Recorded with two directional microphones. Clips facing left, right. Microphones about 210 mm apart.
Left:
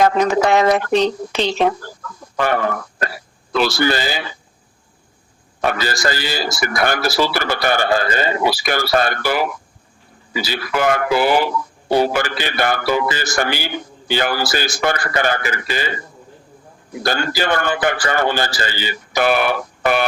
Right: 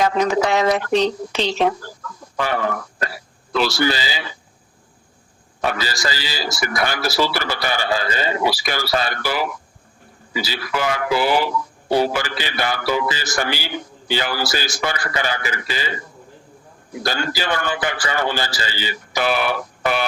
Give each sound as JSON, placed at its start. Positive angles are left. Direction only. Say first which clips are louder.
{"t": 0.0, "sound": "speech", "louder": "left 3 dB", "side_deg": 55}
{"t": 5.6, "sound": "speech", "louder": "left 4 dB", "side_deg": 55}
{"t": 17.0, "sound": "speech", "louder": "left 4 dB", "side_deg": 55}